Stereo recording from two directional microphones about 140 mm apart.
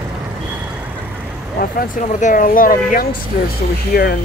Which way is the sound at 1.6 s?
80° left.